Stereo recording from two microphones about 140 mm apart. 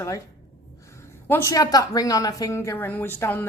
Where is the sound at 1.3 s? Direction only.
20° left (ahead or behind).